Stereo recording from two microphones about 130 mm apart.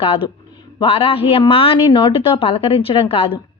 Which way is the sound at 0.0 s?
45° left (ahead or behind).